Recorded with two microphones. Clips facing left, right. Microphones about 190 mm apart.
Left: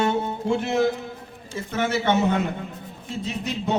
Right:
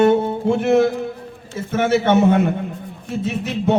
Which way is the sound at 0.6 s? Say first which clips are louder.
Right 7 dB; 55° right (ahead or behind).